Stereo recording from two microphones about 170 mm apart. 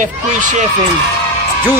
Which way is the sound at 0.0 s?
50° right (ahead or behind).